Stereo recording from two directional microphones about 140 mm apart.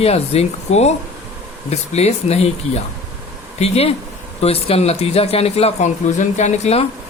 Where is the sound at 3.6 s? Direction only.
45° left (ahead or behind).